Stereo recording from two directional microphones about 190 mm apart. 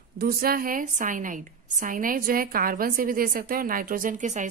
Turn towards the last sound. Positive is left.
turn(degrees=-40)  # may be behind; listen again after turning